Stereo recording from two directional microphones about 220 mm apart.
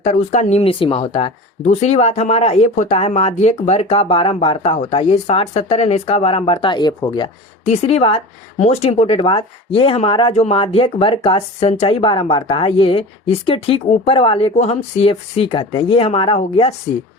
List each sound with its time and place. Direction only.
0.0 s speech: 35° left (ahead or behind)